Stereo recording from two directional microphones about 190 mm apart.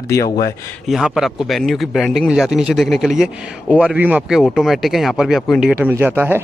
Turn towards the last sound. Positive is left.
turn(degrees=-10)  # may be behind; listen again after turning